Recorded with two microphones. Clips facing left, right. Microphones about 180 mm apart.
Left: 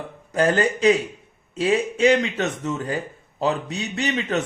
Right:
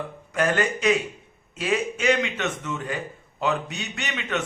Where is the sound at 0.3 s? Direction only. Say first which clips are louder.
Left 4 dB; 35° left (ahead or behind).